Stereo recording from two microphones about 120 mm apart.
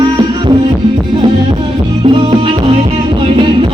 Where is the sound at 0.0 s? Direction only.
45° right (ahead or behind).